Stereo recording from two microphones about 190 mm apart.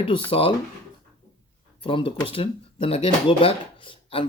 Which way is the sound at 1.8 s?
25° left (ahead or behind).